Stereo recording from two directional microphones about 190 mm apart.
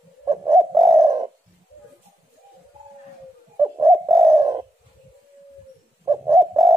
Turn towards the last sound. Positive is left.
turn(degrees=-15)  # may be behind; listen again after turning